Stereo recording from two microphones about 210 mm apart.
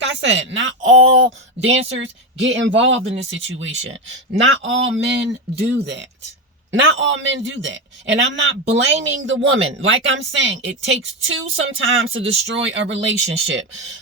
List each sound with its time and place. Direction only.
0.0 s speech: 60° right (ahead or behind)